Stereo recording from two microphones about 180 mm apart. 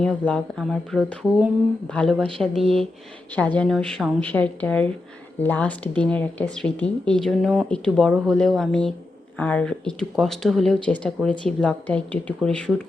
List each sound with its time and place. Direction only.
0.0 s speech: 5° left (ahead or behind)